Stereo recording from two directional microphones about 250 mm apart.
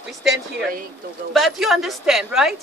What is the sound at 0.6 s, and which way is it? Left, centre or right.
Speech, right.